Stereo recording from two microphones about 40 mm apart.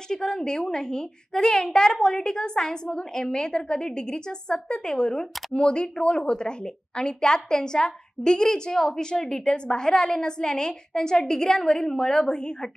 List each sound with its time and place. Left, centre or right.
0.1 s a child's voice: centre